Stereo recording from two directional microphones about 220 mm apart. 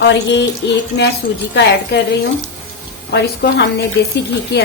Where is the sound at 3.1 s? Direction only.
50° left (ahead or behind).